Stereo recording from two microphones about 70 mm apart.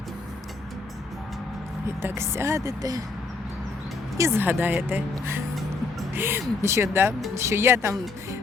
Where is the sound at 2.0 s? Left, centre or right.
Right.